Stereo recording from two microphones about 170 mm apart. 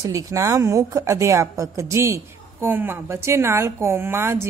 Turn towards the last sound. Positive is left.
turn(degrees=-15)  # may be behind; listen again after turning